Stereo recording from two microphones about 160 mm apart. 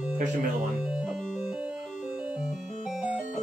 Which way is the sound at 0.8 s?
5° right (ahead or behind).